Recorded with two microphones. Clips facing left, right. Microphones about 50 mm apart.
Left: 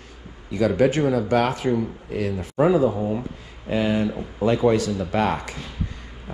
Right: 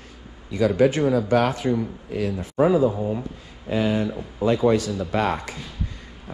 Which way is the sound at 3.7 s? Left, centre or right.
Left.